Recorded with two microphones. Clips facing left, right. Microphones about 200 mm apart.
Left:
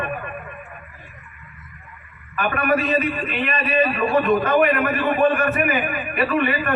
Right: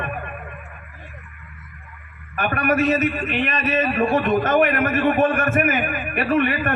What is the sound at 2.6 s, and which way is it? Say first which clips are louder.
A man's voice: right 2 dB; 45° right (ahead or behind).